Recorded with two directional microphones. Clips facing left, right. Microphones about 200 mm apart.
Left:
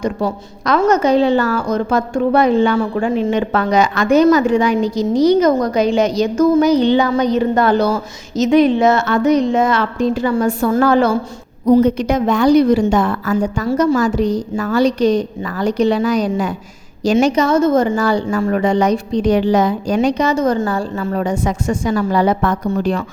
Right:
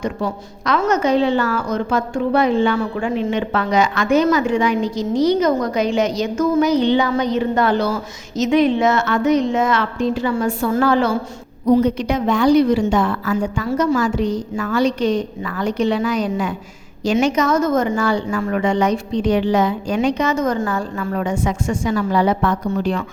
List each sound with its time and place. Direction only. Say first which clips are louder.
0.0 s a woman's voice: left 4 dB; 40° left (ahead or behind)